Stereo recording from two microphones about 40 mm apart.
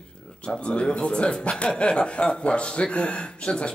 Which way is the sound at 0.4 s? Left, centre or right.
Left.